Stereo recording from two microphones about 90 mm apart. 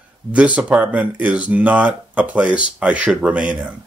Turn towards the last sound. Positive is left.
turn(degrees=-15)  # may be behind; listen again after turning